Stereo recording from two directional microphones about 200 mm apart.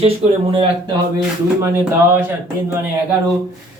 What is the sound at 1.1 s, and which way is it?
Speech, 15° right (ahead or behind).